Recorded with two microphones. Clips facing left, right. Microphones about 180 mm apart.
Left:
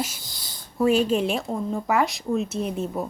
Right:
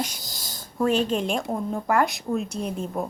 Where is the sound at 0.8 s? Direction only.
10° left (ahead or behind).